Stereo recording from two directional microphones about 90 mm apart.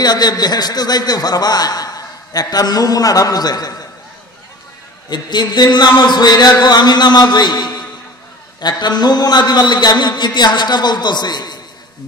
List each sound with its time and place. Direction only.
0.0 s a man's voice: 50° left (ahead or behind)
5.1 s a man's voice: 55° left (ahead or behind)